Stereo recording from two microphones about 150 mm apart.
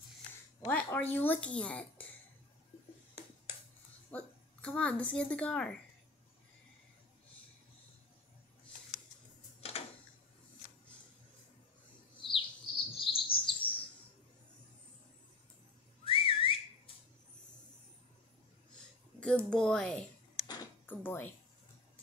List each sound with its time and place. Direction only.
0.7 s speech: 10° left (ahead or behind)
4.1 s a woman's voice: 10° left (ahead or behind)
9.6 s a sound: 40° left (ahead or behind)
12.2 s chirp: 35° left (ahead or behind)
16.1 s whistling: 35° left (ahead or behind)
19.1 s speech: 5° left (ahead or behind)